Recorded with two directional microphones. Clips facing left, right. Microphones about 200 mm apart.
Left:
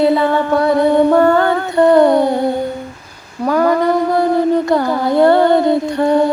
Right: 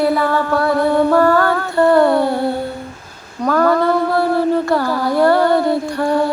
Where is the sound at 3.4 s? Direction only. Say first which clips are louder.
Left 1 dB; 15° left (ahead or behind).